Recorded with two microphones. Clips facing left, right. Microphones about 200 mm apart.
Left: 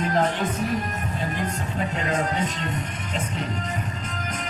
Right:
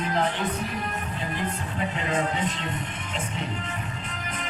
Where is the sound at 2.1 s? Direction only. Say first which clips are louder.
Even; 40° left (ahead or behind).